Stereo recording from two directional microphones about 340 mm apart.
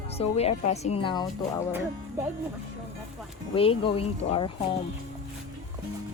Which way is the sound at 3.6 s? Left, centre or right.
Centre.